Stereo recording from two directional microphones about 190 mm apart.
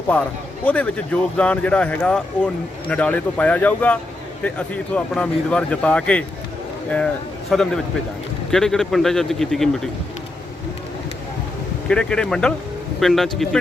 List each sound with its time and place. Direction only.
0.1 s speech: 10° left (ahead or behind)
7.5 s speech: 5° left (ahead or behind)
11.9 s speech: 5° left (ahead or behind)